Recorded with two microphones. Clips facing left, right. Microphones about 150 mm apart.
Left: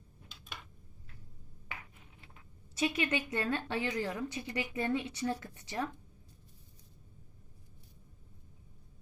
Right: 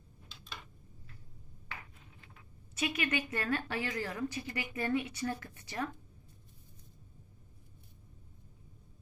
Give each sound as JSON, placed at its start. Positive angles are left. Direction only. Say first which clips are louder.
{"t": 2.7, "sound": "a woman's voice", "louder": "left 2 dB", "side_deg": 30}